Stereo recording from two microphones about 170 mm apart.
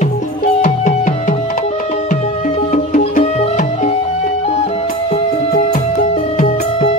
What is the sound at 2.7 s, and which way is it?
Music, 45° left (ahead or behind).